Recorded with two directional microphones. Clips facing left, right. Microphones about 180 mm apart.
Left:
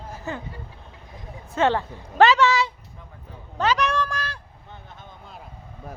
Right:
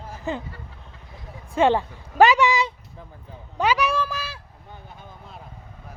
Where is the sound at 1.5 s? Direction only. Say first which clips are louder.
Right 2 dB; 15° right (ahead or behind).